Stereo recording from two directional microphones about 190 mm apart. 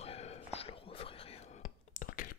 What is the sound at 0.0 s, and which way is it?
Whispering, 35° left (ahead or behind).